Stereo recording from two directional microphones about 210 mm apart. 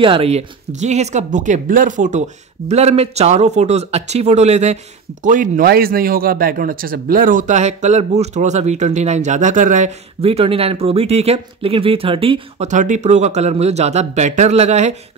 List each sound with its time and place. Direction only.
0.0 s speech: 25° right (ahead or behind)